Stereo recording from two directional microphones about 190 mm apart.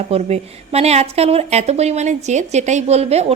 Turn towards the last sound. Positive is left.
turn(degrees=-35)  # may be behind; listen again after turning